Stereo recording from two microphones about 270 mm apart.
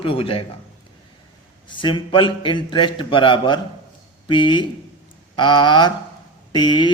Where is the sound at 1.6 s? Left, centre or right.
Centre.